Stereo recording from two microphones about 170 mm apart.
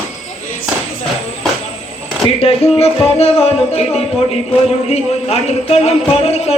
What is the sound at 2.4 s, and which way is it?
Speech, 35° left (ahead or behind).